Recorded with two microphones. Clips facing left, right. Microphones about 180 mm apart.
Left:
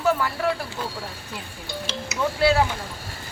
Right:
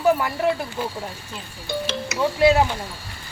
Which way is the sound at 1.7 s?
55° right (ahead or behind).